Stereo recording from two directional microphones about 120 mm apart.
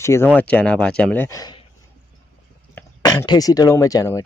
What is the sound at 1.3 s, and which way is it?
Speech, 35° left (ahead or behind).